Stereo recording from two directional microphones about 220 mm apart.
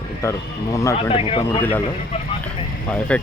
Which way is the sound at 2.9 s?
5° left (ahead or behind).